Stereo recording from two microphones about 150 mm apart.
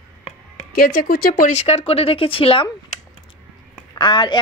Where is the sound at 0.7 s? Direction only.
80° left.